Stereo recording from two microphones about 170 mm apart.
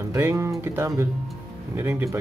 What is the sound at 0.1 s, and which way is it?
Speech, 15° right (ahead or behind).